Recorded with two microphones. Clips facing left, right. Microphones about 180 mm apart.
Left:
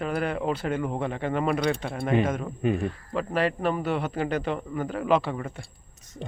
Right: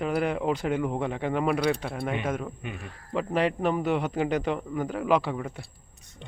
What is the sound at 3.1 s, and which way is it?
Speech, 15° right (ahead or behind).